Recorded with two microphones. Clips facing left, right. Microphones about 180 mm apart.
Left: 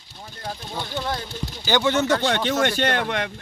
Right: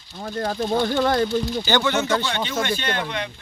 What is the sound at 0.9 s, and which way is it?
Speech, 60° right (ahead or behind).